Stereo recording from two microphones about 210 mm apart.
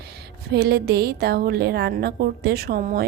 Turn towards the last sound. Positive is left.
turn(degrees=-45)  # may be behind; listen again after turning